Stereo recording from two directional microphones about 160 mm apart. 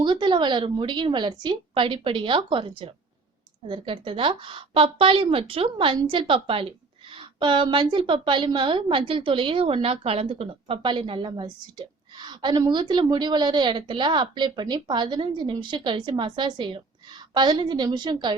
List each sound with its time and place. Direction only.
0.0 s a woman's voice: 30° right (ahead or behind)